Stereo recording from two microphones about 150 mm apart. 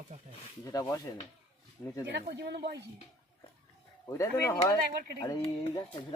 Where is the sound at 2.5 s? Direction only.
90° right.